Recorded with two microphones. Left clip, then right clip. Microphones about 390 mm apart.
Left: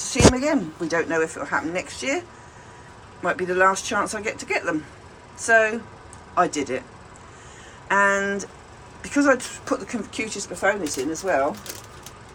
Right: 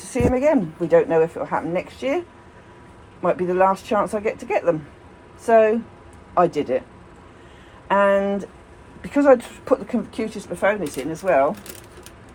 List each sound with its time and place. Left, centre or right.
0.1 s a woman's voice: centre
3.2 s a woman's voice: centre
7.9 s a woman's voice: centre